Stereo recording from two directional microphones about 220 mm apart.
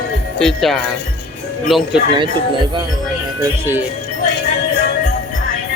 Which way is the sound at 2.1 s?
20° right (ahead or behind).